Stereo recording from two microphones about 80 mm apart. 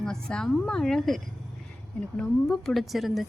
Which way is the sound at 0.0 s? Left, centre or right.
Centre.